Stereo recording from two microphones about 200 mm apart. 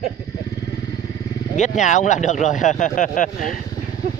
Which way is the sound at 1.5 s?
35° left (ahead or behind).